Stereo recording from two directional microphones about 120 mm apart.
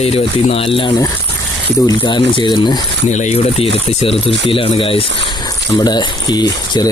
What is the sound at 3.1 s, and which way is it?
Speech, 70° left (ahead or behind).